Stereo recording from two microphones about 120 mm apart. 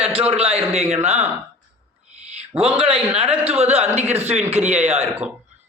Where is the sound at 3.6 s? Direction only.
60° right (ahead or behind).